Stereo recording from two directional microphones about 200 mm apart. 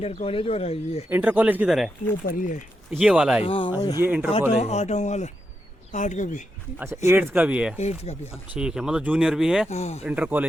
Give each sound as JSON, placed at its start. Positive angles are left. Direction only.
{"t": 0.0, "sound": "speech", "side_deg": 30}
{"t": 1.1, "sound": "speech", "side_deg": -10}
{"t": 2.2, "sound": "speech", "side_deg": 40}
{"t": 2.9, "sound": "speech", "side_deg": -5}
{"t": 3.4, "sound": "speech", "side_deg": 25}
{"t": 4.0, "sound": "speech", "side_deg": -10}
{"t": 4.6, "sound": "speech", "side_deg": 35}
{"t": 6.7, "sound": "speech", "side_deg": -10}
{"t": 7.8, "sound": "speech", "side_deg": 35}
{"t": 8.5, "sound": "speech", "side_deg": -5}
{"t": 9.6, "sound": "speech", "side_deg": 35}
{"t": 10.0, "sound": "speech", "side_deg": -5}